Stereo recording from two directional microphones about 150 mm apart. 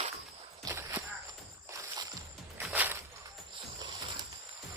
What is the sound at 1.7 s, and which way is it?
Music, 20° right (ahead or behind).